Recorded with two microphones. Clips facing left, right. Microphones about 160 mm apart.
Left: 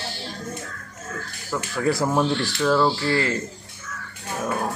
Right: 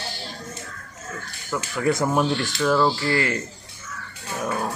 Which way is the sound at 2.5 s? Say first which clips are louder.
Even; centre (ahead or behind).